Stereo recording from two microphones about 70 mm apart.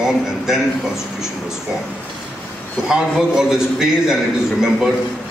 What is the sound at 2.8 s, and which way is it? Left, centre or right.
A man's voice, centre.